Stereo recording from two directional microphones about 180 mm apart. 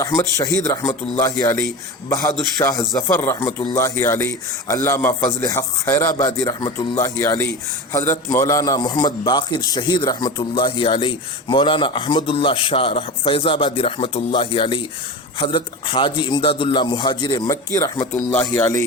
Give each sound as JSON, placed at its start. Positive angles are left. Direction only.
{"t": 0.3, "sound": "a man's voice", "side_deg": 15}